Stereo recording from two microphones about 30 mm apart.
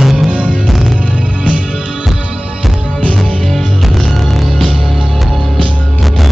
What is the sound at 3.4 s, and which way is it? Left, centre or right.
Music, centre.